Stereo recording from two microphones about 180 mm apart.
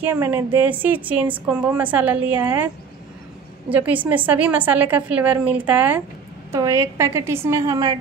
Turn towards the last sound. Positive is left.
turn(degrees=-20)  # may be behind; listen again after turning